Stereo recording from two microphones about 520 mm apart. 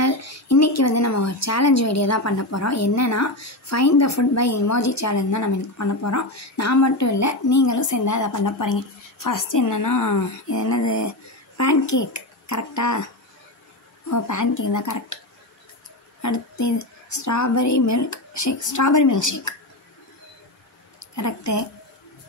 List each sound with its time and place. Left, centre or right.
0.0 s speech: left
14.0 s speech: left
16.2 s speech: left
21.1 s speech: left